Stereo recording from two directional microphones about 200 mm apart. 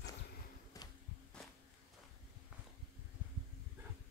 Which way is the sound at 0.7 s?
15° left (ahead or behind).